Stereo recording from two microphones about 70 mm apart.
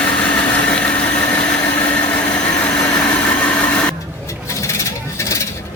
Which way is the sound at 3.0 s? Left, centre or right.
Centre.